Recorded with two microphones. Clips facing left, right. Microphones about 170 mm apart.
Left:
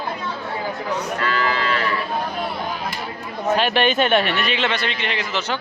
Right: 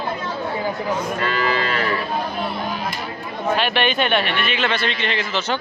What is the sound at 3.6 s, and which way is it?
Speech, 40° left (ahead or behind).